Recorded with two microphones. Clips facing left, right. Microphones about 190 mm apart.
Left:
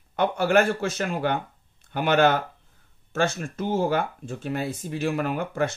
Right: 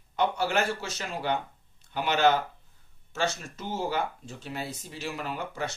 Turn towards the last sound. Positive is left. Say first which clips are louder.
# left 8 dB
turn(degrees=55)  # may be behind; listen again after turning